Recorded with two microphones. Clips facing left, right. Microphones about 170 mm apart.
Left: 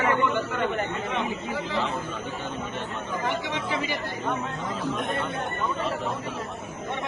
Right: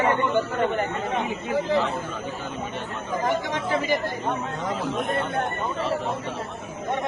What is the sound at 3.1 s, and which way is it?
Speech, 40° right (ahead or behind).